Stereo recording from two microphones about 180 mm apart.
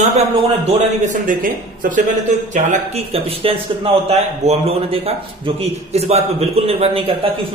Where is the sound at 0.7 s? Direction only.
45° right (ahead or behind).